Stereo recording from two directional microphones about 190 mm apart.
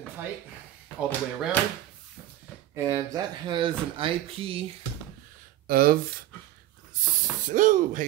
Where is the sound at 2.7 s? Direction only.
15° right (ahead or behind).